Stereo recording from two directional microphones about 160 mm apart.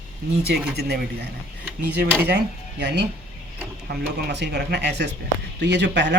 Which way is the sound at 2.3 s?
90° right.